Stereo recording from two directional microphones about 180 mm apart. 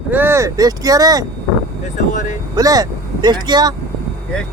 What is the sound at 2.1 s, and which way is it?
Vehicle, 45° left (ahead or behind).